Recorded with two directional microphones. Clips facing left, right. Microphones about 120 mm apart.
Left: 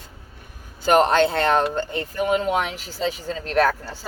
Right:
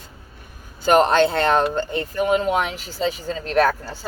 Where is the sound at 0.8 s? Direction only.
30° right (ahead or behind).